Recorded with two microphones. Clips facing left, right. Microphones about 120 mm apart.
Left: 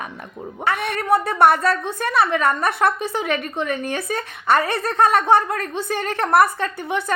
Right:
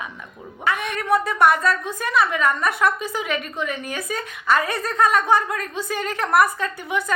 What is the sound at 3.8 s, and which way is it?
A woman's voice, 30° left (ahead or behind).